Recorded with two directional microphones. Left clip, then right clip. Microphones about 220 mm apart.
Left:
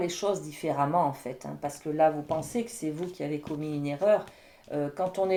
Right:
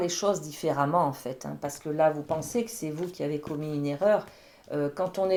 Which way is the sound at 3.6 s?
30° right (ahead or behind).